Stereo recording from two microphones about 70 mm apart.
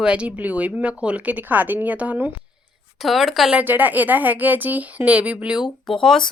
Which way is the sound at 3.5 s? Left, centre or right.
Right.